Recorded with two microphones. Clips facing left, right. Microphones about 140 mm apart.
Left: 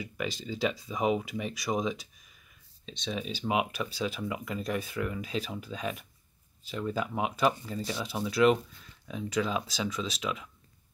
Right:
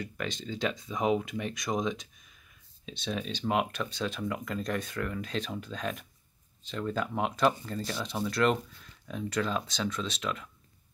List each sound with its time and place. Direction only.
0.0 s speech: 5° left (ahead or behind)